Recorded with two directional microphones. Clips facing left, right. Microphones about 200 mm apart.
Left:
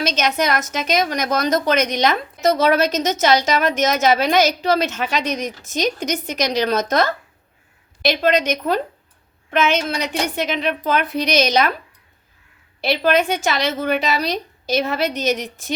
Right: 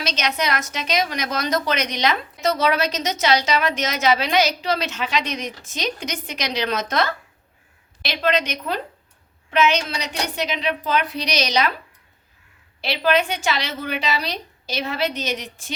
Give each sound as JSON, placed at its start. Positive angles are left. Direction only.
{"t": 0.0, "sound": "a woman's voice", "side_deg": 45}
{"t": 12.8, "sound": "a woman's voice", "side_deg": 45}